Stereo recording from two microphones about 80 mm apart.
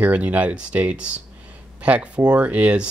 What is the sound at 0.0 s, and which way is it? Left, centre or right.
Speech, centre.